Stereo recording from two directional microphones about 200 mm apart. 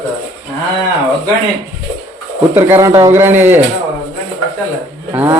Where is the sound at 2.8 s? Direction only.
15° right (ahead or behind).